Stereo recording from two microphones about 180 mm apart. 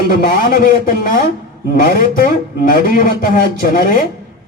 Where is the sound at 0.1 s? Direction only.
55° left (ahead or behind).